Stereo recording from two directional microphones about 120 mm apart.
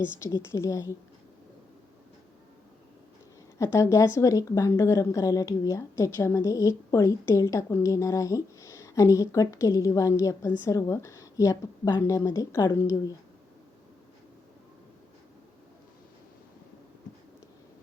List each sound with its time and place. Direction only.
0.2 s a woman's voice: 25° left (ahead or behind)
3.6 s a woman's voice: 25° left (ahead or behind)